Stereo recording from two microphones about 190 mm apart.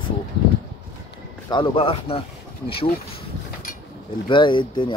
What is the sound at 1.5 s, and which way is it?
Speech, 25° left (ahead or behind).